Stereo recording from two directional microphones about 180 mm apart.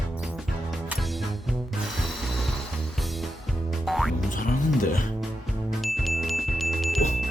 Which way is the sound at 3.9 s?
Centre (ahead or behind).